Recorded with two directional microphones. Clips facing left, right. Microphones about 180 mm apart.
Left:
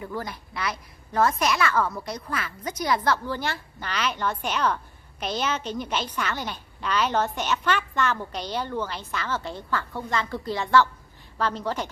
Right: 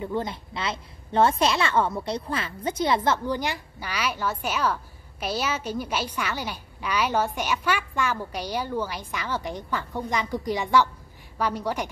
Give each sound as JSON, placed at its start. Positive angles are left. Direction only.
{"t": 0.0, "sound": "a woman's voice", "side_deg": -25}